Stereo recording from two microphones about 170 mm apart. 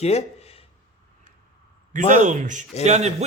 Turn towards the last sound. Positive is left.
turn(degrees=-40)  # may be behind; listen again after turning